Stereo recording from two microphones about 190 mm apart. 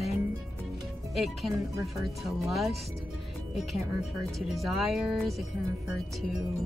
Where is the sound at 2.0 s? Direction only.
Centre (ahead or behind).